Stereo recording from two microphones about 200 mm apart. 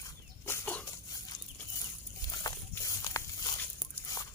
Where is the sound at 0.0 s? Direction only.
10° left (ahead or behind).